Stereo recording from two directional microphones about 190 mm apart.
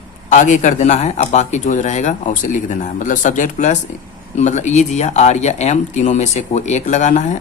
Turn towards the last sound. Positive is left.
turn(degrees=40)  # may be behind; listen again after turning